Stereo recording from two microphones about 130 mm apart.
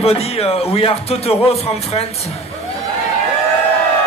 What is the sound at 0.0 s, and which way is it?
Speech, 50° left (ahead or behind).